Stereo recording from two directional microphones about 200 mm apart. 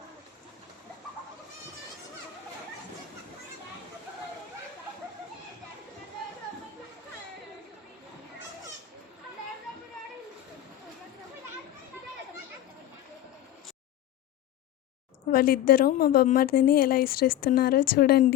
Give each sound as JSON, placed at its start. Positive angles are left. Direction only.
{"t": 15.3, "sound": "a woman's voice", "side_deg": 45}